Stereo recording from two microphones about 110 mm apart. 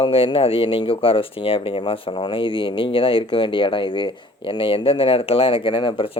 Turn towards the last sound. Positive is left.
turn(degrees=50)  # may be behind; listen again after turning